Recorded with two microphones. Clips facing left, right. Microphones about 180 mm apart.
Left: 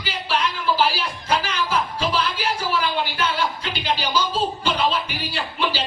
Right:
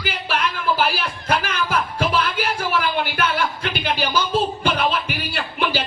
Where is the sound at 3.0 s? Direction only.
55° right (ahead or behind).